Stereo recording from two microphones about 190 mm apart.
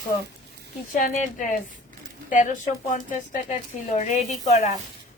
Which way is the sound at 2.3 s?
40° left (ahead or behind).